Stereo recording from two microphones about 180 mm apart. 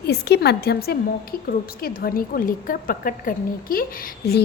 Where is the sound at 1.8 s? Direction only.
55° left (ahead or behind).